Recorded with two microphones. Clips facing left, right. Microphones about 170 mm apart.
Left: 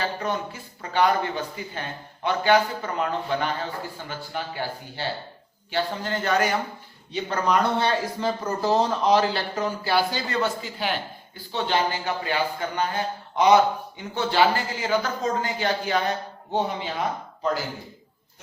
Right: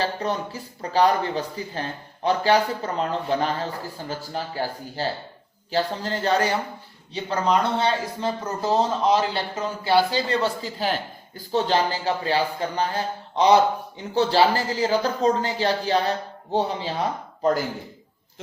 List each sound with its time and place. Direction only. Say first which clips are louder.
0.0 s speech: right 2 dB; 35° right (ahead or behind)